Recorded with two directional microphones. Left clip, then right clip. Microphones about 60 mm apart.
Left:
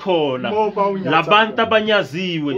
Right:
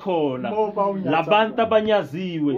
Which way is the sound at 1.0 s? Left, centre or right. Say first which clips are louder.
Left 5 dB; right.